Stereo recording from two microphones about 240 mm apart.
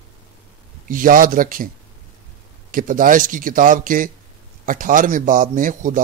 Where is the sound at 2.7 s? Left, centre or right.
Right.